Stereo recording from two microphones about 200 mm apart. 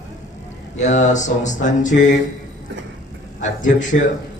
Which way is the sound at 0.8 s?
40° left (ahead or behind).